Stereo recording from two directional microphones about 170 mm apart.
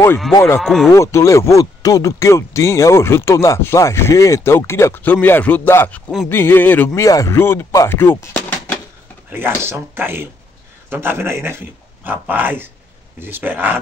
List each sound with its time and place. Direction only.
0.3 s speech: 20° left (ahead or behind)
0.6 s speech: centre (ahead or behind)
0.9 s speech: 15° left (ahead or behind)
9.3 s speech: 15° right (ahead or behind)